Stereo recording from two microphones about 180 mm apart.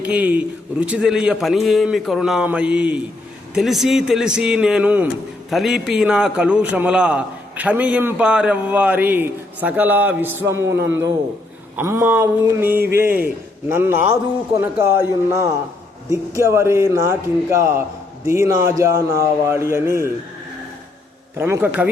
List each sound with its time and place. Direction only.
0.0 s a man's voice: 5° right (ahead or behind)
21.3 s a man's voice: 15° right (ahead or behind)